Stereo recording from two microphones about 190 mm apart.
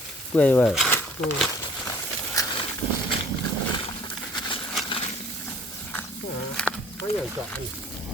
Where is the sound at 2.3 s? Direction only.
20° left (ahead or behind).